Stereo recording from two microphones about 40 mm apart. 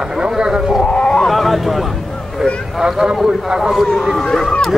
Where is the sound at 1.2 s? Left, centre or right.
Centre.